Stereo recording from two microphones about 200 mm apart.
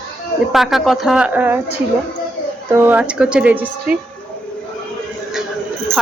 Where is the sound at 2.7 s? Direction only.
10° right (ahead or behind).